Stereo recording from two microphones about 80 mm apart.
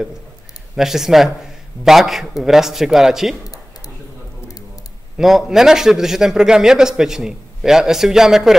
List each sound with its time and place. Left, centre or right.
0.7 s a man's voice: centre
3.4 s a sound: left
5.1 s a man's voice: centre